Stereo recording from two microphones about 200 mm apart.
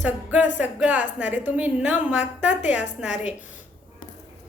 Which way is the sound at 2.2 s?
35° left (ahead or behind).